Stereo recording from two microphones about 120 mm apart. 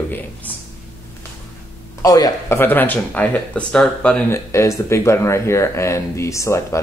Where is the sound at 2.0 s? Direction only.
30° left (ahead or behind).